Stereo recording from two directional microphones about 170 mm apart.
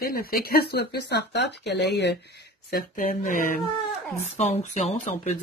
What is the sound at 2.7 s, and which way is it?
Speech, 55° left (ahead or behind).